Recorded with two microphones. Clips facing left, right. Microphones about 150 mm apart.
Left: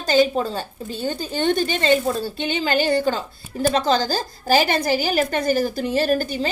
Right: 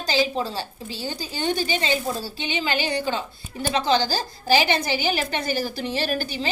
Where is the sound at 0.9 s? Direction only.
55° left (ahead or behind).